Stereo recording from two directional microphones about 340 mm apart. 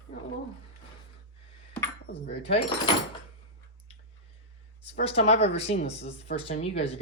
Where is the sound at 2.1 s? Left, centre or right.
Left.